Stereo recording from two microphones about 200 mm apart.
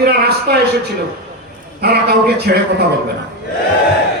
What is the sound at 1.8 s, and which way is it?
Speech, 50° right (ahead or behind).